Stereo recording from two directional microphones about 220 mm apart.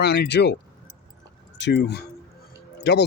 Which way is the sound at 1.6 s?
50° left (ahead or behind).